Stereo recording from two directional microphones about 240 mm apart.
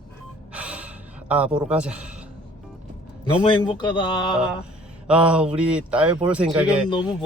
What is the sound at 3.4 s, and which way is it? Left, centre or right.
Speech, centre.